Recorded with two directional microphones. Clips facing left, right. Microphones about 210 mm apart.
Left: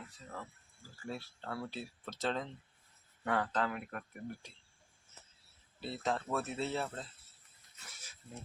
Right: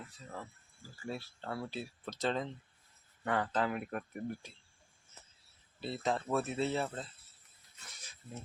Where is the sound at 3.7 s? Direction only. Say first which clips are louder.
Right 4 dB; 20° right (ahead or behind).